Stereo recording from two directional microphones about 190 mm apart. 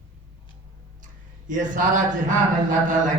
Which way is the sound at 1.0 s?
40° right (ahead or behind).